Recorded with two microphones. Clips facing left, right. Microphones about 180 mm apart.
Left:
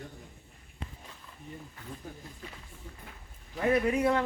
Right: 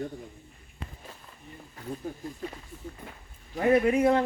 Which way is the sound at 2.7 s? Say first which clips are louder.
Right 6 dB; 40° right (ahead or behind).